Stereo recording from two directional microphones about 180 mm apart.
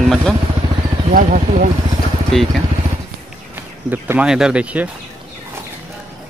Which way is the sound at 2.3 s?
5° left (ahead or behind).